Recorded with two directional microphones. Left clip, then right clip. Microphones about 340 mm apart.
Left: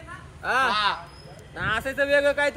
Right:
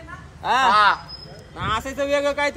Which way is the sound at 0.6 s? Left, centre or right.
Centre.